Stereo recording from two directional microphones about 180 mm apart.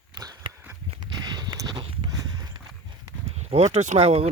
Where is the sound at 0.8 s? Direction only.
25° right (ahead or behind).